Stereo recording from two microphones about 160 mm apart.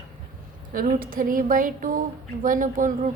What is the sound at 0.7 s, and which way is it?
A woman's voice, 65° right (ahead or behind).